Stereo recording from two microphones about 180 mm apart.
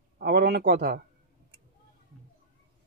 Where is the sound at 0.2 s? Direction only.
60° right (ahead or behind).